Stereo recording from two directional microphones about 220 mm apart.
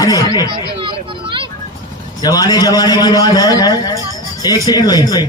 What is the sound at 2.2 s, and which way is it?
Speech, 15° left (ahead or behind).